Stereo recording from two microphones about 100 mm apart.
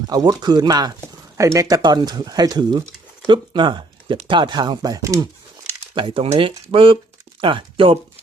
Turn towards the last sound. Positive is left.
turn(degrees=-60)  # may be behind; listen again after turning